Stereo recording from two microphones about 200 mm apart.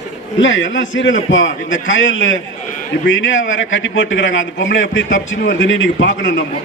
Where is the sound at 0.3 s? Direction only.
70° left (ahead or behind).